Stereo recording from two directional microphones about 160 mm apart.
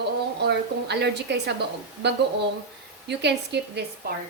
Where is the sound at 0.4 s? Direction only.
90° right.